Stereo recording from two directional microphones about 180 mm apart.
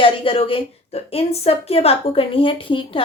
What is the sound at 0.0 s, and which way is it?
A woman's voice, 30° left (ahead or behind).